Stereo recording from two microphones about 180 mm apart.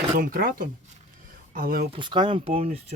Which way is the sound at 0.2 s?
55° right (ahead or behind).